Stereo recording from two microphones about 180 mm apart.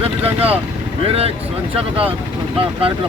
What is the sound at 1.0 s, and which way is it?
Speech, 35° right (ahead or behind).